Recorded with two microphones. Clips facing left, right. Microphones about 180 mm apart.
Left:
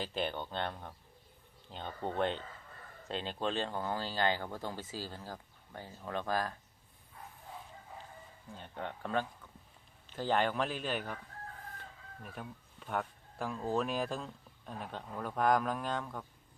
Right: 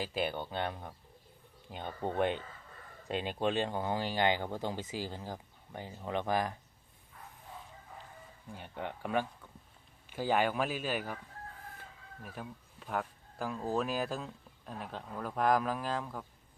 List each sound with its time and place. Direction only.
0.0 s speech: 10° right (ahead or behind)
8.5 s speech: 10° right (ahead or behind)